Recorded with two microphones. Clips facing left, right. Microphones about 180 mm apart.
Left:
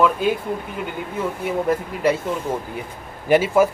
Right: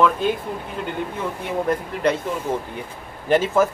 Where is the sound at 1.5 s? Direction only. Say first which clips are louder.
Left 1 dB; 5° left (ahead or behind).